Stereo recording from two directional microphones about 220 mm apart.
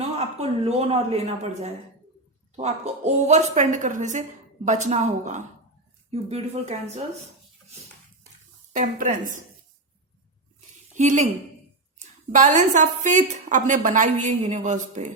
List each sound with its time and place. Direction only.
0.2 s a woman's voice: 30° right (ahead or behind)
8.7 s a woman's voice: 35° right (ahead or behind)
10.9 s a woman's voice: 30° right (ahead or behind)